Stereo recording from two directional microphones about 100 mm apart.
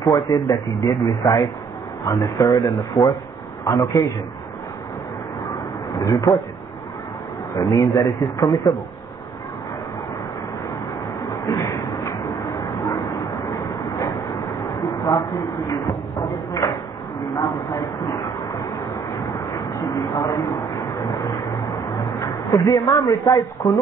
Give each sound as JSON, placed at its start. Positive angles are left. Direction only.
{"t": 0.0, "sound": "speech", "side_deg": 35}
{"t": 5.9, "sound": "speech", "side_deg": 40}
{"t": 7.5, "sound": "speech", "side_deg": 30}
{"t": 8.4, "sound": "speech", "side_deg": 45}
{"t": 11.2, "sound": "a sound", "side_deg": 30}
{"t": 12.8, "sound": "bow-wow", "side_deg": 30}
{"t": 15.0, "sound": "speech", "side_deg": 40}
{"t": 18.0, "sound": "a sound", "side_deg": 35}
{"t": 19.1, "sound": "vehicle", "side_deg": 40}
{"t": 19.6, "sound": "a sound", "side_deg": 35}
{"t": 21.0, "sound": "vehicle", "side_deg": 40}
{"t": 21.9, "sound": "speech", "side_deg": 40}